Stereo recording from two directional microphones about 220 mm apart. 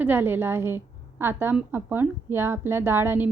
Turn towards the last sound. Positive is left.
turn(degrees=-10)  # may be behind; listen again after turning